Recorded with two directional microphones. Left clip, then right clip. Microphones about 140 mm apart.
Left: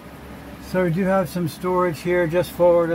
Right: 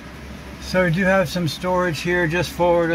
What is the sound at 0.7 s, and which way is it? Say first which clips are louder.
Speech: right 3 dB; 25° right (ahead or behind).